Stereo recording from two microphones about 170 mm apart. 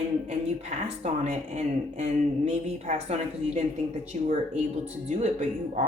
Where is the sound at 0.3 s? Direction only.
40° right (ahead or behind).